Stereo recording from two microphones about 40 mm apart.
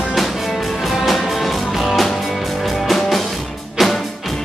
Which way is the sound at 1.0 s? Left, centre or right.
Centre.